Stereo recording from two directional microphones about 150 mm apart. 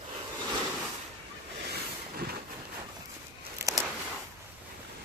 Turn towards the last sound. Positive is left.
turn(degrees=-20)  # may be behind; listen again after turning